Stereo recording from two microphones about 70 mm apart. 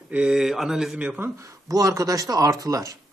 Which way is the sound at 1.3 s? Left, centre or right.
Right.